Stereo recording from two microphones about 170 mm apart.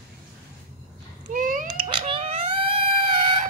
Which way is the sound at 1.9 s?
30° right (ahead or behind).